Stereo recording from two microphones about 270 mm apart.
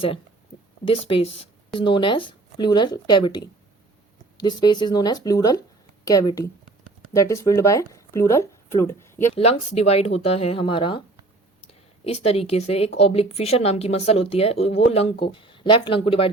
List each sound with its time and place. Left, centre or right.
0.9 s speech: left
9.3 s speech: left